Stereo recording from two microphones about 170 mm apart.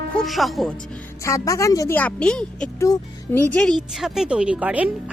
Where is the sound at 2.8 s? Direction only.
15° left (ahead or behind).